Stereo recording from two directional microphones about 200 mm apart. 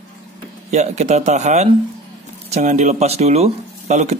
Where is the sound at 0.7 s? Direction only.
35° right (ahead or behind).